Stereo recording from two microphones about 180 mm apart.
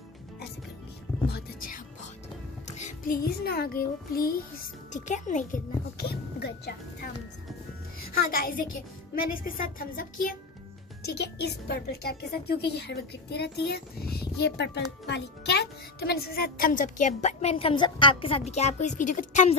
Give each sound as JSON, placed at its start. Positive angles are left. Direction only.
{"t": 1.2, "sound": "speech", "side_deg": 55}
{"t": 2.6, "sound": "a child's voice", "side_deg": 40}
{"t": 8.1, "sound": "a child's voice", "side_deg": 55}
{"t": 11.1, "sound": "a woman's voice", "side_deg": 65}